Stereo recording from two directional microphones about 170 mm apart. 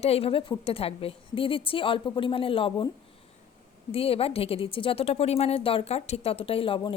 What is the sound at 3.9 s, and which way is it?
A woman's voice, 35° left (ahead or behind).